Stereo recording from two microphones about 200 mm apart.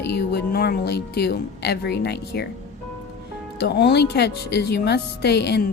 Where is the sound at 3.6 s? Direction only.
55° left (ahead or behind).